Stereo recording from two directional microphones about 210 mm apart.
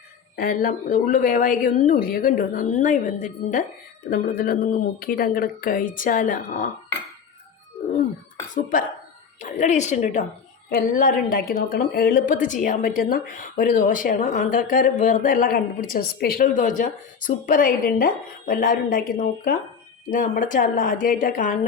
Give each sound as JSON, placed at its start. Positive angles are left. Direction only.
{"t": 0.3, "sound": "speech", "side_deg": 45}
{"t": 9.4, "sound": "speech", "side_deg": 35}
{"t": 20.1, "sound": "speech", "side_deg": 40}